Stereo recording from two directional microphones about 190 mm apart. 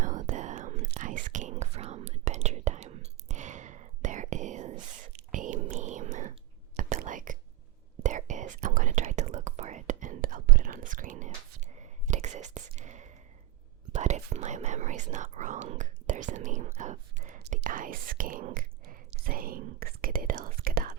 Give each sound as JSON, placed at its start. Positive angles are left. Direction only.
{"t": 0.0, "sound": "whispering", "side_deg": -40}